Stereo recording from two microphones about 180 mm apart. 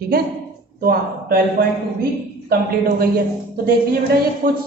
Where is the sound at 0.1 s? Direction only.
55° right (ahead or behind).